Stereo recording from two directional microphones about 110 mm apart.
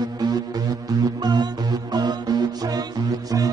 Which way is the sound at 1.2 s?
40° right (ahead or behind).